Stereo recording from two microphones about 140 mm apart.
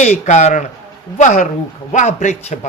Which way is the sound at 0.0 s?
55° left (ahead or behind).